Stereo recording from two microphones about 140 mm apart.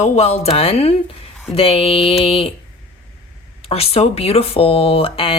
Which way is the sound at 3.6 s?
45° left (ahead or behind).